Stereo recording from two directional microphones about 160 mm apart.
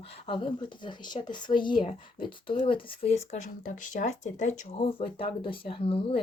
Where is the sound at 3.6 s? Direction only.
50° left (ahead or behind).